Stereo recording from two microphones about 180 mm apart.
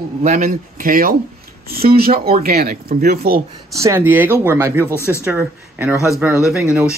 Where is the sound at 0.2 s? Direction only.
40° right (ahead or behind); by 3.4 s 60° right (ahead or behind).